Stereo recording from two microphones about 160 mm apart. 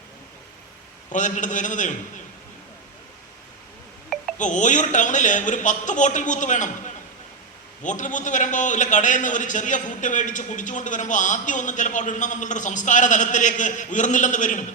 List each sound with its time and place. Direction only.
1.1 s a man's voice: 50° left (ahead or behind)
4.4 s a man's voice: 50° left (ahead or behind)